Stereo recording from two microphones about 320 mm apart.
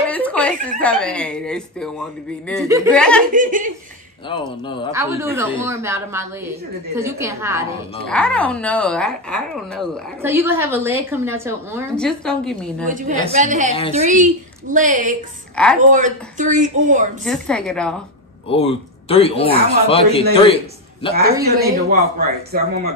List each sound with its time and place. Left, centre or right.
0.1 s a sound: centre
0.8 s speech: centre
3.3 s speech: right
4.3 s speech: centre
4.9 s a woman's voice: centre
8.0 s a woman's voice: centre
12.8 s speech: right
15.5 s speech: centre
15.8 s speech: right
17.2 s speech: centre
18.5 s a man's voice: centre
21.4 s a woman's voice: centre
21.8 s speech: right